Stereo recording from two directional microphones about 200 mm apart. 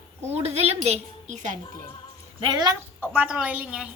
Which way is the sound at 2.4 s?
20° right (ahead or behind).